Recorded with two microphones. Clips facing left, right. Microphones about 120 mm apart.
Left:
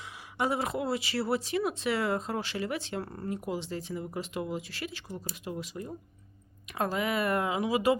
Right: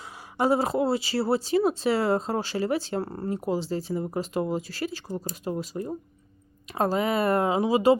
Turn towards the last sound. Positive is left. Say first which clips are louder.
# right 6 dB
turn(degrees=-30)  # may be behind; listen again after turning